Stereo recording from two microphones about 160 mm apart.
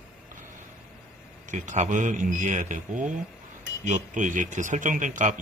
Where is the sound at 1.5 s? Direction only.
50° right (ahead or behind).